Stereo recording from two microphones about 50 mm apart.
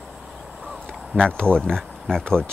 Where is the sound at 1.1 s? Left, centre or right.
Centre.